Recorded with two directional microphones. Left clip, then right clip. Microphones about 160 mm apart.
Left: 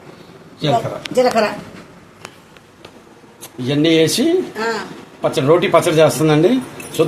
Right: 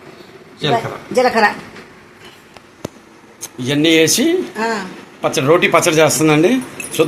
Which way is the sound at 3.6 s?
5° right (ahead or behind).